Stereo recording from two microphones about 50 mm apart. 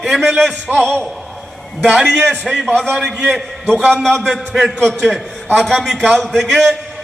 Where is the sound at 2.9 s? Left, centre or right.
Centre.